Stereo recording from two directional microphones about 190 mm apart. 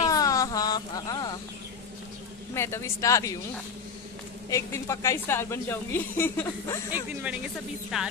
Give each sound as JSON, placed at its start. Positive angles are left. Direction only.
{"t": 0.0, "sound": "a sound", "side_deg": 20}
{"t": 2.5, "sound": "a woman's voice", "side_deg": 15}
{"t": 4.5, "sound": "a woman's voice", "side_deg": 15}
{"t": 7.9, "sound": "speech", "side_deg": 0}